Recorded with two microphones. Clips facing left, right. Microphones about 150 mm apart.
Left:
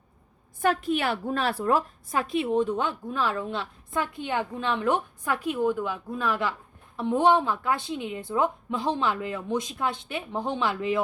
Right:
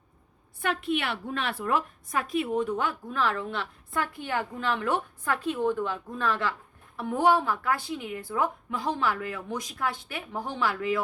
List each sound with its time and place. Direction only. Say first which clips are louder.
0.6 s a woman's voice: left 4 dB; 40° left (ahead or behind); by 11.0 s 20° left (ahead or behind)